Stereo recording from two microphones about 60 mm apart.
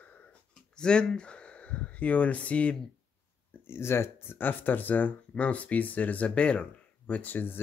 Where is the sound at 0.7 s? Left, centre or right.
Centre.